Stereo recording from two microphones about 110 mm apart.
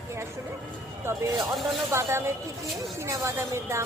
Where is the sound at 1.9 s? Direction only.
25° right (ahead or behind).